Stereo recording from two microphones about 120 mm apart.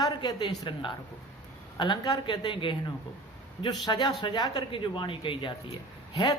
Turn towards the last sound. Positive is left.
turn(degrees=40)  # may be behind; listen again after turning